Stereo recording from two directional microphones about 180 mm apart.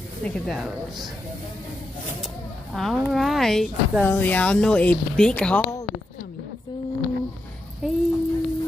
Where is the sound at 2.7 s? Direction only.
Centre (ahead or behind).